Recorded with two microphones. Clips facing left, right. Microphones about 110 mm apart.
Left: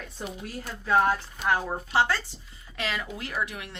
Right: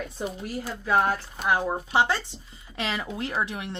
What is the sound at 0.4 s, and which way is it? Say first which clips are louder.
Speech: right 3 dB; 10° right (ahead or behind).